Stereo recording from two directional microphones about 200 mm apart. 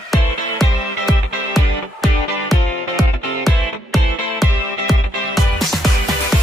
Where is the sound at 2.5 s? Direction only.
Centre (ahead or behind).